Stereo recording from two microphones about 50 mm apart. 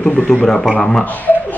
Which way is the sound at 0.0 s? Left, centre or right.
Left.